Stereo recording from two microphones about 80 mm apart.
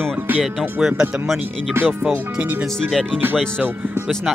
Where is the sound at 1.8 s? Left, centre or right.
Right.